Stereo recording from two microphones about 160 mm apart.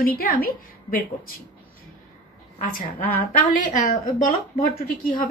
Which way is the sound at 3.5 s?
55° left (ahead or behind).